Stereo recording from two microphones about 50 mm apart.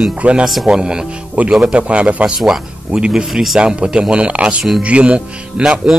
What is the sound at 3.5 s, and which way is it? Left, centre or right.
Speech, centre.